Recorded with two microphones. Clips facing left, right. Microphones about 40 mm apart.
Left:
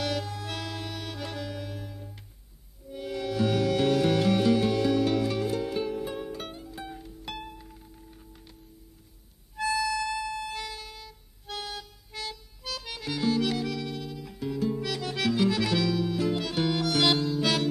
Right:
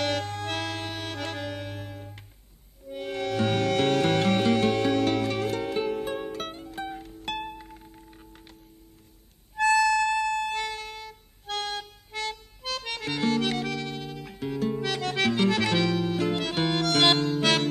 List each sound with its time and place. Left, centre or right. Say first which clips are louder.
0.0 s music: right 3 dB; right
9.6 s music: right 7 dB; right